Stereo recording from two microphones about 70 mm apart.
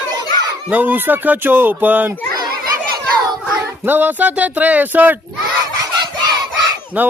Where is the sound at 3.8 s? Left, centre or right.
Right.